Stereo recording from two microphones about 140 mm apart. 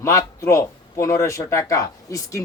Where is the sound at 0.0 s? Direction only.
20° left (ahead or behind).